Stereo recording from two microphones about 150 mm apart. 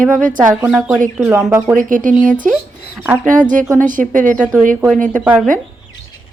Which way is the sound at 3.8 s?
60° right (ahead or behind).